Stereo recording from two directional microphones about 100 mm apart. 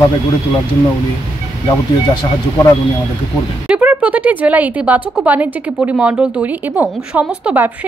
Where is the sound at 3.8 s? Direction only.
15° right (ahead or behind).